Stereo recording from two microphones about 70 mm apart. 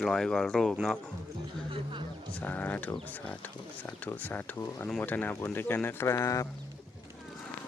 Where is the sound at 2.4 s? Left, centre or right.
Left.